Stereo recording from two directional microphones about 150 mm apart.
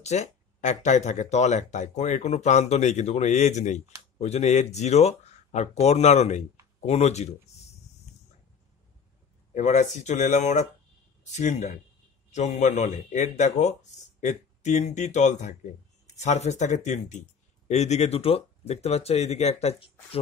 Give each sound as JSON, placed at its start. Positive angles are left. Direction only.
{"t": 0.0, "sound": "speech", "side_deg": 50}
{"t": 9.5, "sound": "speech", "side_deg": 55}